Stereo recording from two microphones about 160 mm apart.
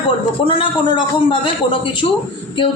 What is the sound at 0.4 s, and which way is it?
Speech, 30° left (ahead or behind).